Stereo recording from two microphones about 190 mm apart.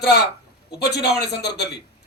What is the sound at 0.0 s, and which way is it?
A man's voice, 60° left (ahead or behind).